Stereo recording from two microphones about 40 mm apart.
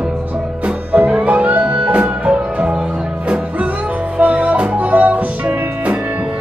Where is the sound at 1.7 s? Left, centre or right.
Right.